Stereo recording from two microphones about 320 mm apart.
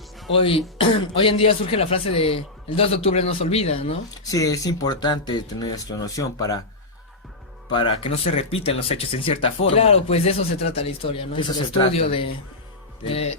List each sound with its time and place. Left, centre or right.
0.3 s speech: centre
7.7 s speech: centre